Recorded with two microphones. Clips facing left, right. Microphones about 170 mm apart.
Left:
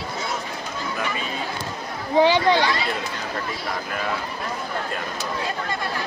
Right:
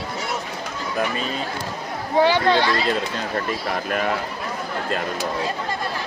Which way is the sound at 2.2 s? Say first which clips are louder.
Even; 15° left (ahead or behind).